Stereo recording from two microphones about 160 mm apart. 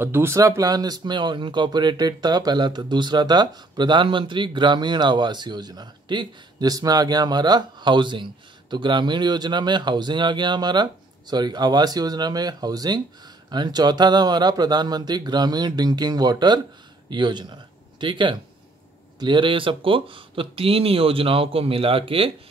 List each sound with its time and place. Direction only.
0.0 s speech: 15° right (ahead or behind); by 22.3 s 35° right (ahead or behind)